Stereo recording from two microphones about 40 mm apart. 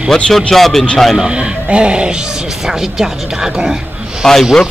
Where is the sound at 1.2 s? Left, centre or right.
Right.